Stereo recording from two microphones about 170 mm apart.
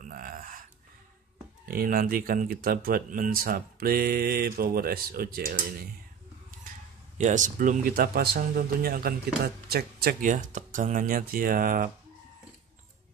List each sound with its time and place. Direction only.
0.0 s a sound: 55° right (ahead or behind)
1.7 s speech: 60° right (ahead or behind)
7.2 s speech: 45° right (ahead or behind)